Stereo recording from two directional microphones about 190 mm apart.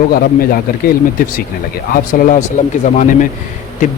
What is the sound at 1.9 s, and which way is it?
Speech, 45° left (ahead or behind).